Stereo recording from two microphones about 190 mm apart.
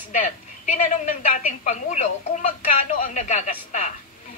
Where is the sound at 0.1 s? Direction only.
40° left (ahead or behind).